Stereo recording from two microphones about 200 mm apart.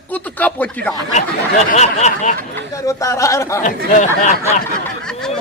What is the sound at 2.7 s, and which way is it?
Speech, 15° left (ahead or behind).